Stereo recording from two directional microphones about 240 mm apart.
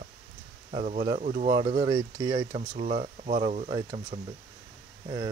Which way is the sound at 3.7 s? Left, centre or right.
Centre.